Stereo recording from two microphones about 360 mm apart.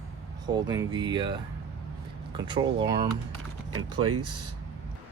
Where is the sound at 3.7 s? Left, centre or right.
Right.